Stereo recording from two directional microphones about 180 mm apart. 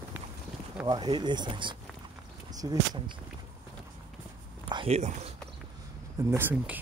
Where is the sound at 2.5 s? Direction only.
20° right (ahead or behind).